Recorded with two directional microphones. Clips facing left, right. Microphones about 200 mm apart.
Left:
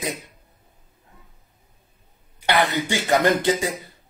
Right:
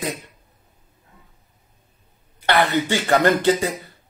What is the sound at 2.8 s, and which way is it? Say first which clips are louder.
Speech: right 2 dB; 15° left (ahead or behind).